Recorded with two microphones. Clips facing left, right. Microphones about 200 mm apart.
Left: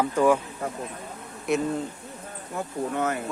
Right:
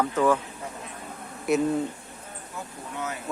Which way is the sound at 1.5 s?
Centre (ahead or behind).